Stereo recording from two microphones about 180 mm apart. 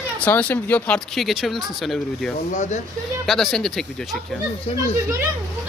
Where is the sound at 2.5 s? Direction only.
40° left (ahead or behind).